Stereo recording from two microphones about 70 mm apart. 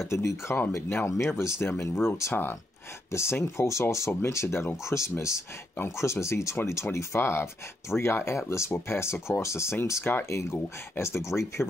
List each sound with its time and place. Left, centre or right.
0.1 s speech: left